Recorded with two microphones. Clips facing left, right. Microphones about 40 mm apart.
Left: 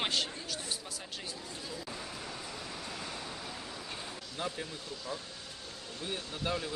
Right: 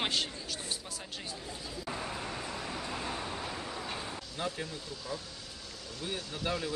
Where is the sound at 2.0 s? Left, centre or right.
Right.